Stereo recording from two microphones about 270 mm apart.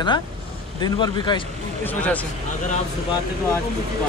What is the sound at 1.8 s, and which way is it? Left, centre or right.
Speech, centre.